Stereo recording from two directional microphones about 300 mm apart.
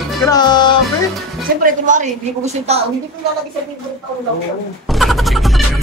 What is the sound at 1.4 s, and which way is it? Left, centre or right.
A woman's voice, right.